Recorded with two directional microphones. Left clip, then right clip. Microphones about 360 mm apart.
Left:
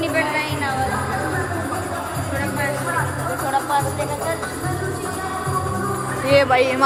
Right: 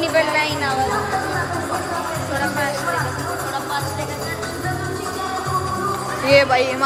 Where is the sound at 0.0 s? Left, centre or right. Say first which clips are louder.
Right 3 dB; right.